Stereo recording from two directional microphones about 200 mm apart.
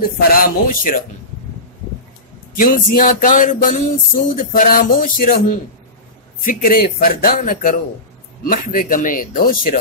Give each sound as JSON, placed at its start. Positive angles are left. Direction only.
{"t": 0.3, "sound": "speech", "side_deg": 45}
{"t": 2.5, "sound": "speech", "side_deg": 40}